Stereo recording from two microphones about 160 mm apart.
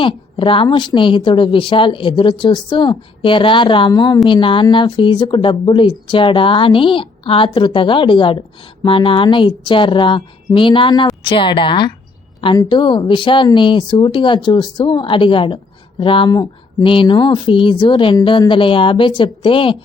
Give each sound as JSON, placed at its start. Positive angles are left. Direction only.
{"t": 0.0, "sound": "a woman's voice", "side_deg": 30}